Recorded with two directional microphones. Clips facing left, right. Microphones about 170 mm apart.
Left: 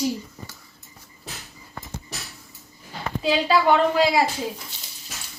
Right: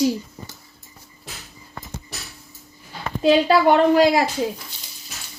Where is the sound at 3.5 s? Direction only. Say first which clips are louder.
Right 4 dB; 50° right (ahead or behind).